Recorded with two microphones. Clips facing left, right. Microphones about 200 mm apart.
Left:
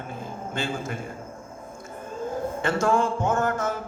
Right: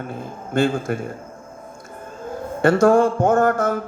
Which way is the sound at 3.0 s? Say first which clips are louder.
Right 8 dB; 60° right (ahead or behind).